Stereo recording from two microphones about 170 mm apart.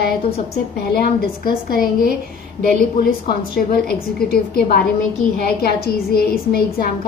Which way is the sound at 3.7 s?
65° left (ahead or behind).